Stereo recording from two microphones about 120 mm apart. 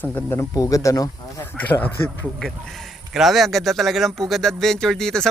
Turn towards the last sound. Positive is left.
turn(degrees=5)  # may be behind; listen again after turning